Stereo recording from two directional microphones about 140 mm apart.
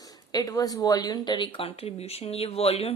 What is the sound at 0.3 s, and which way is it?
Speech, 25° left (ahead or behind).